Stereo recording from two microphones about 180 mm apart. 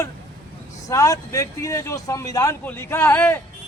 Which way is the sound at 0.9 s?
20° left (ahead or behind).